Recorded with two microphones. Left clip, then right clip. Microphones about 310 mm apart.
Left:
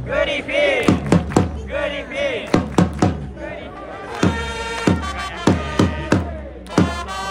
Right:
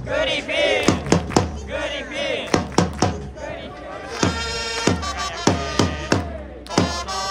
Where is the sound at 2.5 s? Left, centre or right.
Right.